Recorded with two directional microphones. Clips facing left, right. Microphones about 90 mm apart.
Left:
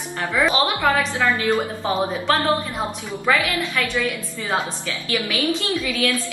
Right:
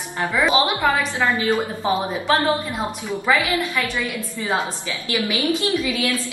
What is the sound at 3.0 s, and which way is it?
A woman's voice, 15° right (ahead or behind).